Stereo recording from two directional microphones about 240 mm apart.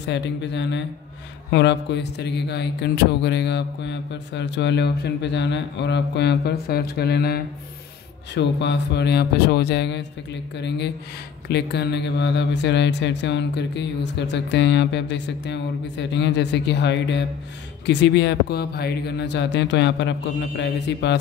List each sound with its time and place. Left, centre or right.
0.0 s speech: left